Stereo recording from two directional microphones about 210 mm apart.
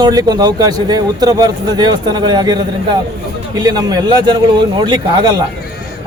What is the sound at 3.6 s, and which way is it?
A man's voice, 20° right (ahead or behind).